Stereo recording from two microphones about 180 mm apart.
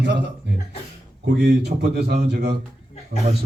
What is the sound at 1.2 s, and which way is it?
A man's voice, 70° right (ahead or behind).